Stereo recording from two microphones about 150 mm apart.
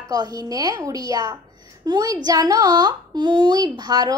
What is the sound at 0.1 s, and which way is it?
Speech, 25° right (ahead or behind).